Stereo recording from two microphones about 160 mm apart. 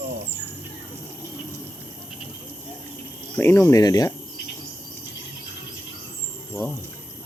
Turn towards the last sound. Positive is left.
turn(degrees=15)  # may be behind; listen again after turning